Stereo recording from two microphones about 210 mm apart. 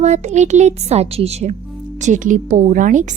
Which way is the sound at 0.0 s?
35° right (ahead or behind).